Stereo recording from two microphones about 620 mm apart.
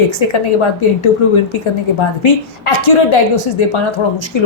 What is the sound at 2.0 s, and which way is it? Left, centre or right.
Speech, left.